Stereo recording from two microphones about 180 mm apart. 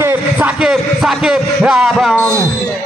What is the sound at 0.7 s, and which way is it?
Speech, 5° right (ahead or behind).